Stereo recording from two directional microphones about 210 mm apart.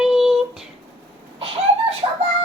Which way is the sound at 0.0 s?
Centre (ahead or behind).